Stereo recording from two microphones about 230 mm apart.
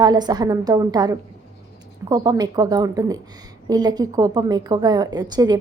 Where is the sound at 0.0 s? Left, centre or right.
Centre.